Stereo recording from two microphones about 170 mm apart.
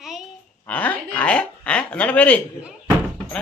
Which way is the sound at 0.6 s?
10° left (ahead or behind).